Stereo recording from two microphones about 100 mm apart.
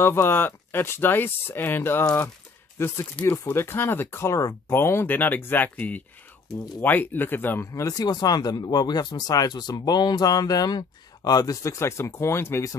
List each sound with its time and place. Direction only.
0.0 s speech: 25° left (ahead or behind)
7.6 s speech: 35° left (ahead or behind)